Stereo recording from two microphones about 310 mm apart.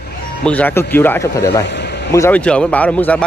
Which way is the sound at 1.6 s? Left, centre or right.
Left.